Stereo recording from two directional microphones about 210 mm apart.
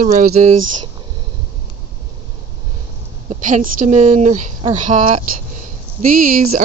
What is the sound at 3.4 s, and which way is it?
Speech, 40° right (ahead or behind).